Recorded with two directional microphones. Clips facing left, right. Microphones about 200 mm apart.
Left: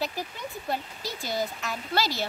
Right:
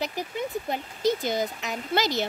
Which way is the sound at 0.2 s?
20° right (ahead or behind).